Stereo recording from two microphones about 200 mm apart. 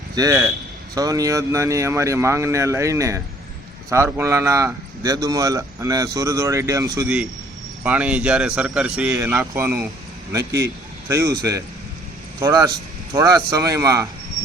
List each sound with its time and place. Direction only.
0.2 s speech: 15° right (ahead or behind)
7.9 s speech: 5° right (ahead or behind)
12.4 s speech: 15° right (ahead or behind)